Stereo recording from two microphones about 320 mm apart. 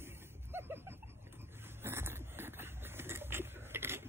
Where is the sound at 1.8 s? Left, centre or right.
Centre.